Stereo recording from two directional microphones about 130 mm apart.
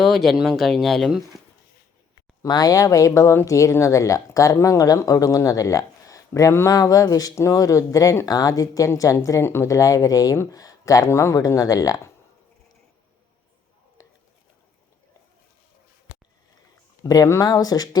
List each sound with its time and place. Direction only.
0.0 s speech: centre (ahead or behind)
2.4 s speech: 30° left (ahead or behind)
14.0 s a sound: 25° left (ahead or behind)
17.0 s speech: 25° left (ahead or behind)